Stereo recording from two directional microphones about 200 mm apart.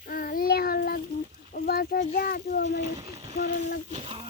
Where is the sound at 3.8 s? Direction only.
30° right (ahead or behind).